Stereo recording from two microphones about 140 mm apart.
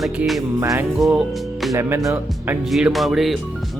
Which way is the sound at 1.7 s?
20° right (ahead or behind).